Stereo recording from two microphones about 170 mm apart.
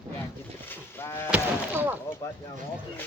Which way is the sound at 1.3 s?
10° right (ahead or behind).